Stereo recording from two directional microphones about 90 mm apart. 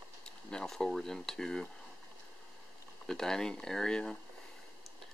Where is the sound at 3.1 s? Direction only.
5° left (ahead or behind).